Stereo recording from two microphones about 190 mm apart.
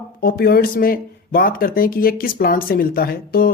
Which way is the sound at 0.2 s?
55° left (ahead or behind).